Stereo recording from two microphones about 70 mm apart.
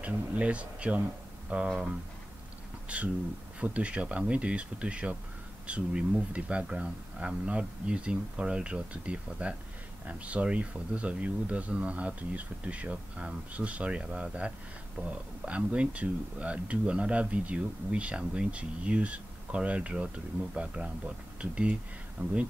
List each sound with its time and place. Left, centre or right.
0.0 s speech: centre
2.9 s speech: centre